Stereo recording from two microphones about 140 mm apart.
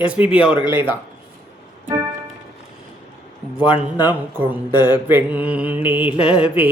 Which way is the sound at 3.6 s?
35° left (ahead or behind).